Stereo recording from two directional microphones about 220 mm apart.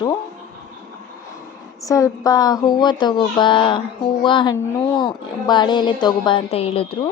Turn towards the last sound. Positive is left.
turn(degrees=25)  # may be behind; listen again after turning